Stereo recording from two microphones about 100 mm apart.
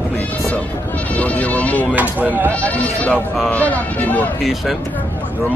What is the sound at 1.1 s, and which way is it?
Speech, 15° left (ahead or behind).